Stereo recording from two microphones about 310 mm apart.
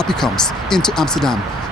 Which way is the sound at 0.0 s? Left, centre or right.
Centre.